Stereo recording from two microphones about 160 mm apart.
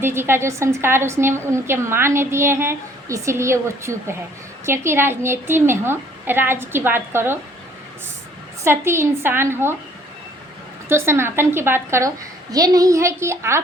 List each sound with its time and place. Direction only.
0.0 s a woman's voice: 15° right (ahead or behind)
8.6 s a woman's voice: 15° right (ahead or behind)
10.8 s a woman's voice: 15° right (ahead or behind)